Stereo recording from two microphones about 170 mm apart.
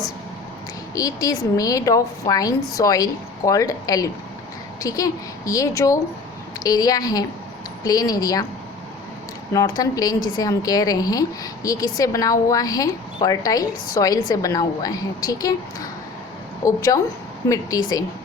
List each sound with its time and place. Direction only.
0.9 s a woman's voice: 20° left (ahead or behind)
9.5 s a woman's voice: 20° left (ahead or behind)